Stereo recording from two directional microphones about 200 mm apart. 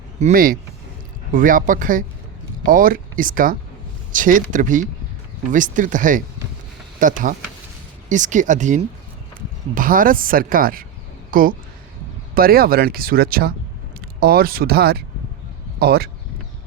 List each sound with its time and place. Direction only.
0.2 s speech: 40° right (ahead or behind)